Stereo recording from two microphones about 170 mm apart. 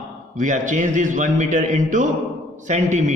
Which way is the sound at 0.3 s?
45° right (ahead or behind).